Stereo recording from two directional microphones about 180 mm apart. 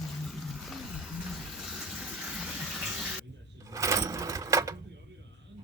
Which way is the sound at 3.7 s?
15° right (ahead or behind).